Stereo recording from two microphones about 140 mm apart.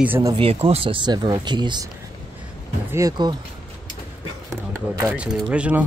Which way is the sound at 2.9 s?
25° right (ahead or behind).